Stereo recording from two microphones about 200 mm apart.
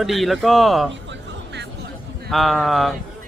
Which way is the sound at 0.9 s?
60° right (ahead or behind).